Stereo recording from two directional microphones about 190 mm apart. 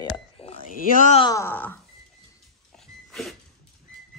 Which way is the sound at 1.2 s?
15° left (ahead or behind).